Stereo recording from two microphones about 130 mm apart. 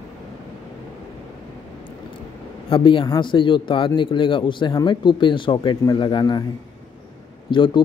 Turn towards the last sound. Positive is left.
turn(degrees=40)  # may be behind; listen again after turning